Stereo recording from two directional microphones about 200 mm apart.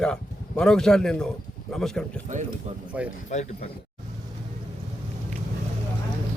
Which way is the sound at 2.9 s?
5° right (ahead or behind).